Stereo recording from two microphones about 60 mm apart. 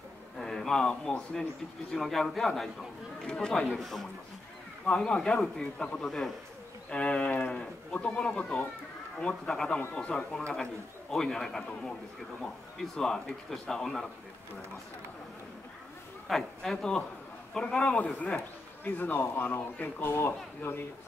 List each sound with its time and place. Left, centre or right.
0.4 s a man's voice: centre
3.7 s a man's voice: centre
4.8 s a man's voice: centre
6.0 s a man's voice: centre
6.9 s speech: centre
9.3 s a man's voice: centre
16.3 s speech: centre; by 18.4 s left
18.9 s speech: left